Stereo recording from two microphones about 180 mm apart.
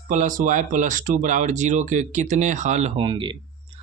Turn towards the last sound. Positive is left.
turn(degrees=-30)  # may be behind; listen again after turning